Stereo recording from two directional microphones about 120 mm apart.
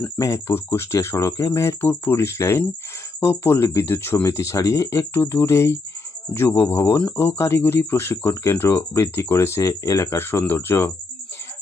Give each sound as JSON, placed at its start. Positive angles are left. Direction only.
{"t": 0.0, "sound": "speech", "side_deg": 25}